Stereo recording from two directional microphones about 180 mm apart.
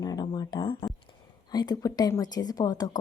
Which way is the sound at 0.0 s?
20° left (ahead or behind).